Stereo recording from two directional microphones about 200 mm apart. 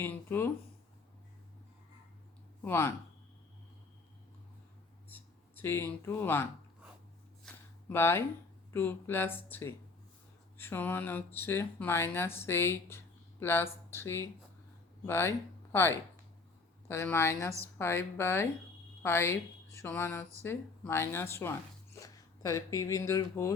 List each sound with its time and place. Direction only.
0.0 s a woman's voice: 10° left (ahead or behind)
2.6 s a woman's voice: 10° left (ahead or behind)
5.1 s speech: 10° left (ahead or behind)
7.4 s a sound: 10° left (ahead or behind)
8.7 s a woman's voice: 10° left (ahead or behind)